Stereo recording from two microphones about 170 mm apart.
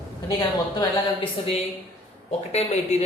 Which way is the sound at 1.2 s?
35° left (ahead or behind).